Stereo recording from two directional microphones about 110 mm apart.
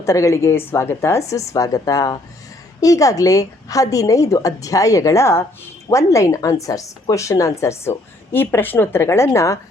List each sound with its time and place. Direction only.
0.0 s a woman's voice: 30° left (ahead or behind)